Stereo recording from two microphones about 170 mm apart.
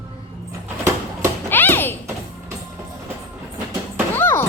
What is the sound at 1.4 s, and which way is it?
Bouncing, 10° left (ahead or behind).